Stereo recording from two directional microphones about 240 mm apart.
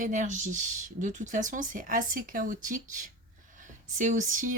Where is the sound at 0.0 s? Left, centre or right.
Right.